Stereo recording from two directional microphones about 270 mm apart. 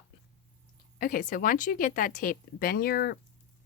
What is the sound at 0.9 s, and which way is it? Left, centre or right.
Speech, left.